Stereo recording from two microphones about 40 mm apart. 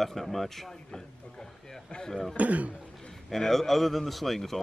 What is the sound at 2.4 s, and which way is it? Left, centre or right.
Speech, right.